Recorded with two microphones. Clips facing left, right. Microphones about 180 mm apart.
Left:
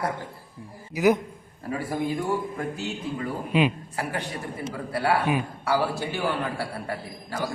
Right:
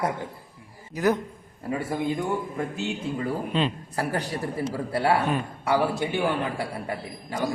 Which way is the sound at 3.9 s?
40° right (ahead or behind).